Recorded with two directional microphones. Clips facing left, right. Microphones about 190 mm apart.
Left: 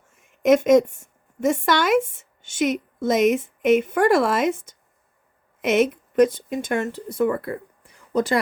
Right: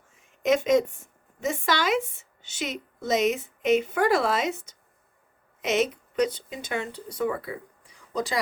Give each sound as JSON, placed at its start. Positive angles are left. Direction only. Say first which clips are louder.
{"t": 0.1, "sound": "a woman's voice", "louder": "left 6 dB", "side_deg": 50}